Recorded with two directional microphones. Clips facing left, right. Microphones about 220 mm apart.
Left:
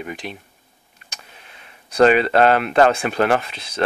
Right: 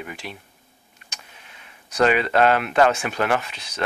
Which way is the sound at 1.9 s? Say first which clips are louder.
Left 5 dB; 35° left (ahead or behind).